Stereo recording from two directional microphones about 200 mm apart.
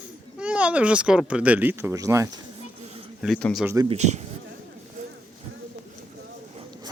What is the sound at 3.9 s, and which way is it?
Speech, 35° right (ahead or behind).